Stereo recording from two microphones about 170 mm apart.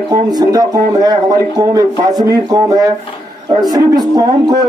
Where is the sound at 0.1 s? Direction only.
25° right (ahead or behind).